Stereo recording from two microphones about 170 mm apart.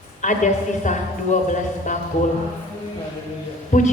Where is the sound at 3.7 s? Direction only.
45° left (ahead or behind).